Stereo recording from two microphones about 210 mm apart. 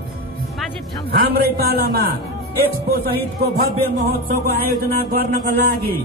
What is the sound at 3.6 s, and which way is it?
A man's voice, 45° right (ahead or behind).